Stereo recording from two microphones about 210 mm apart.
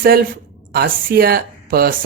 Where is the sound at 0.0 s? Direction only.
45° right (ahead or behind).